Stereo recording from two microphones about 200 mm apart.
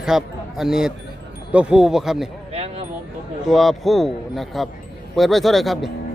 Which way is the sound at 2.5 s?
30° right (ahead or behind).